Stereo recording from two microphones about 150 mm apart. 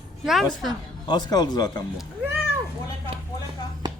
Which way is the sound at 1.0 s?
25° left (ahead or behind).